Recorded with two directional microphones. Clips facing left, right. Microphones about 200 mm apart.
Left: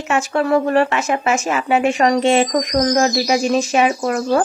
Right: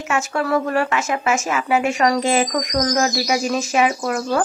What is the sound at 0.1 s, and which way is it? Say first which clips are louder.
A woman's voice: left 4 dB; 30° left (ahead or behind).